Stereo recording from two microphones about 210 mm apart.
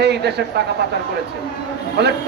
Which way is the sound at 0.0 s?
50° right (ahead or behind).